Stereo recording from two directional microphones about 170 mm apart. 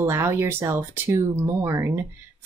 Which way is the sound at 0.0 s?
15° right (ahead or behind).